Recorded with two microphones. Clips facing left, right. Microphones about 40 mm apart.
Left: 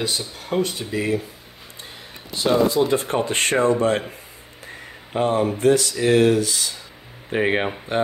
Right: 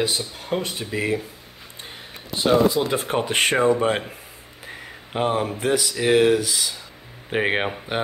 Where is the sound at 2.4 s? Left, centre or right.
Centre.